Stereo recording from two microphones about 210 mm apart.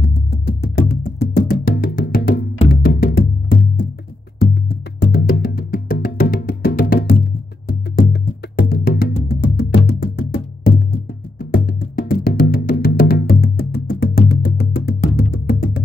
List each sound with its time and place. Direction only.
0.0 s music: 50° left (ahead or behind)